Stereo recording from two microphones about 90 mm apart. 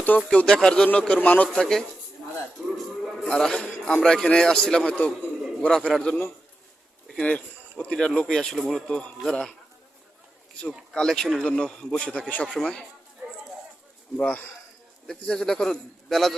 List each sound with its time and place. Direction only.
0.0 s speech: 15° left (ahead or behind)
1.5 s a man's voice: 5° left (ahead or behind)
2.7 s music: centre (ahead or behind)
3.2 s speech: 5° left (ahead or behind)
10.9 s a man's voice: 5° left (ahead or behind)
14.2 s a man's voice: 15° left (ahead or behind)